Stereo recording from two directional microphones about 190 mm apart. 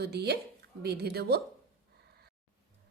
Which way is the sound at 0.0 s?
60° right (ahead or behind).